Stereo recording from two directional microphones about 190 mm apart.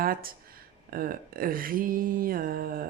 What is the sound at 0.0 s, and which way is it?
Speech, 50° right (ahead or behind).